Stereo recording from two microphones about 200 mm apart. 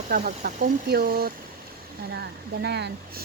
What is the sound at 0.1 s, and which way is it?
Speech, 40° right (ahead or behind).